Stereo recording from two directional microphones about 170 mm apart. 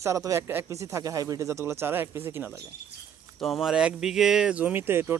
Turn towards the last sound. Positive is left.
turn(degrees=-15)  # may be behind; listen again after turning